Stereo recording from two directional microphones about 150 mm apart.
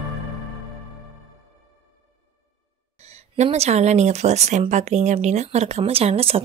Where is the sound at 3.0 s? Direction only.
45° right (ahead or behind).